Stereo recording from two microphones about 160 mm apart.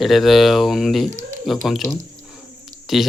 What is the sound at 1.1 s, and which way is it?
Speech, 50° right (ahead or behind).